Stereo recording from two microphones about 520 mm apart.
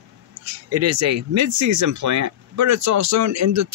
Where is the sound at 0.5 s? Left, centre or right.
Right.